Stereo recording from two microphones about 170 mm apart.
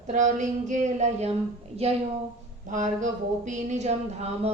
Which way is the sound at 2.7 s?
45° right (ahead or behind).